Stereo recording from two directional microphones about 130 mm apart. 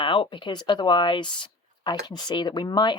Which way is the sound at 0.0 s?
40° left (ahead or behind).